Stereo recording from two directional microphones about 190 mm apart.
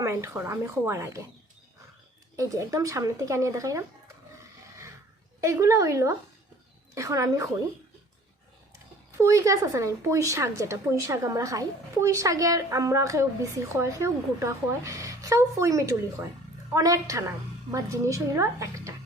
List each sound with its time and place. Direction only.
0.0 s a woman's voice: 15° right (ahead or behind)
2.3 s a woman's voice: 15° right (ahead or behind)
5.4 s a woman's voice: 15° right (ahead or behind)
9.1 s a woman's voice: 15° right (ahead or behind)